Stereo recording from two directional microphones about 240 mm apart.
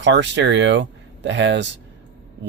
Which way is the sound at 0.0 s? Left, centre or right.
Right.